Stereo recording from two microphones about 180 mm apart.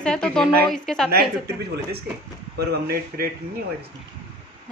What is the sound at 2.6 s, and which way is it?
Speech, 60° right (ahead or behind).